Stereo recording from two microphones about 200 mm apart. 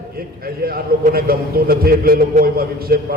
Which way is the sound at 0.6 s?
45° right (ahead or behind).